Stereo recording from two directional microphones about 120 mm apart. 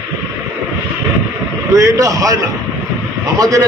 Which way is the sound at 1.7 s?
25° right (ahead or behind).